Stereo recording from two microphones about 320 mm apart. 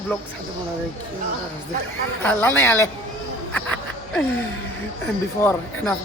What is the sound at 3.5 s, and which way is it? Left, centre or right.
Insect, centre.